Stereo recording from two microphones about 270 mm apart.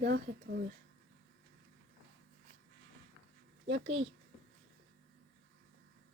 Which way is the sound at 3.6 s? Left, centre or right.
Right.